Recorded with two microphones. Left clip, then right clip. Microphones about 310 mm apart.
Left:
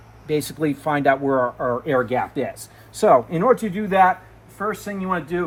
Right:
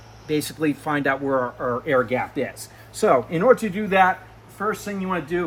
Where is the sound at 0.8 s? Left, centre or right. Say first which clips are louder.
Left 7 dB; centre.